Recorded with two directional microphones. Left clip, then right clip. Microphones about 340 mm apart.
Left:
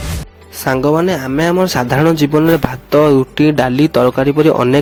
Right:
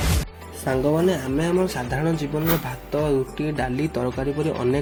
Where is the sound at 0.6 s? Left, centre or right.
Left.